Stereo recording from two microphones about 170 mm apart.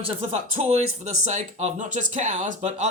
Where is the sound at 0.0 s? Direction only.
35° right (ahead or behind).